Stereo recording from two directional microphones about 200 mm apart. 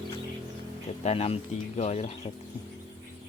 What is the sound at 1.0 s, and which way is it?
Speech, 30° left (ahead or behind).